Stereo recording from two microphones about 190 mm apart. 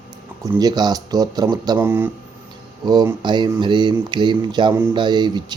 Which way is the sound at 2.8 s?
20° right (ahead or behind).